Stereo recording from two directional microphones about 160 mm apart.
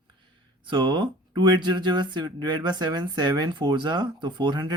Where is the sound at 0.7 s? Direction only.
30° right (ahead or behind).